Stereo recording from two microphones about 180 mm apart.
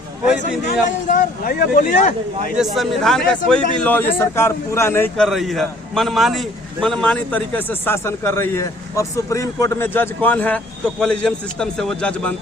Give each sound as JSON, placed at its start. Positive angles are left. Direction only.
{"t": 0.7, "sound": "speech", "side_deg": 45}
{"t": 2.7, "sound": "a man's voice", "side_deg": 0}